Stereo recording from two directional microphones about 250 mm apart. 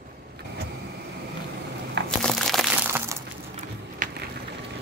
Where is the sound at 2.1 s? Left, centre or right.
Centre.